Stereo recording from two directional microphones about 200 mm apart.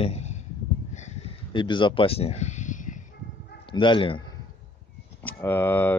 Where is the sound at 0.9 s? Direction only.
35° left (ahead or behind).